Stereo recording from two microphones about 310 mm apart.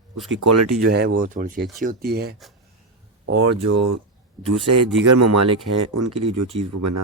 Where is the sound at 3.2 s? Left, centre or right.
Right.